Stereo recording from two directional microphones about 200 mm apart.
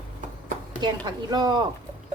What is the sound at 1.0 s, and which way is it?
Speech, 20° right (ahead or behind).